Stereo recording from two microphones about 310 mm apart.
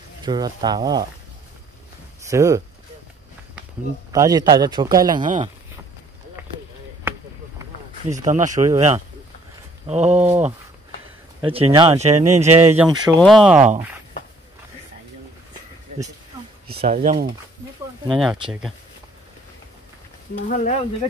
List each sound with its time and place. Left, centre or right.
0.2 s a man's voice: centre
2.2 s speech: centre
4.1 s a man's voice: centre
5.2 s speech: right
8.1 s speech: right
8.6 s a man's voice: centre
11.7 s a man's voice: centre
13.1 s speech: centre
16.8 s speech: right
18.1 s speech: centre
20.4 s sizzle: left